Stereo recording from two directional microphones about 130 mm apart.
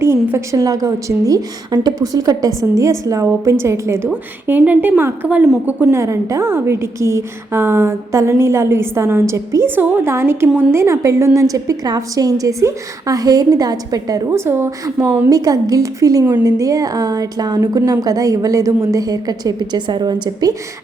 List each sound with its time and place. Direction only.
0.0 s a woman's voice: 20° right (ahead or behind)
15.3 s a woman's voice: 30° right (ahead or behind)